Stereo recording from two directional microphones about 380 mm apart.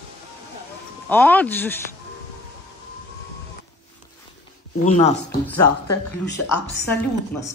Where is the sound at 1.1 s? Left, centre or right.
Centre.